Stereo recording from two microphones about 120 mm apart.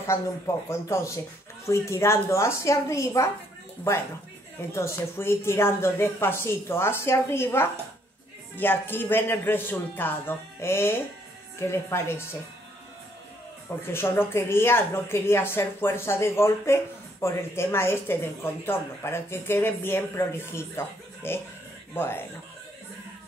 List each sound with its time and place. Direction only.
0.7 s a woman's voice: 25° left (ahead or behind)
4.7 s a woman's voice: 20° left (ahead or behind)
13.9 s a woman's voice: 20° left (ahead or behind)